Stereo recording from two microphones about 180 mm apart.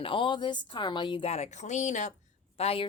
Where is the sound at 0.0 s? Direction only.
30° left (ahead or behind).